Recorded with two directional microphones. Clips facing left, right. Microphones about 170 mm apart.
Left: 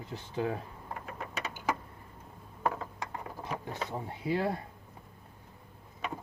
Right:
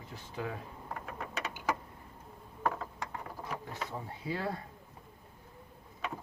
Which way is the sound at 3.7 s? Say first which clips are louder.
Left 3 dB; 20° left (ahead or behind).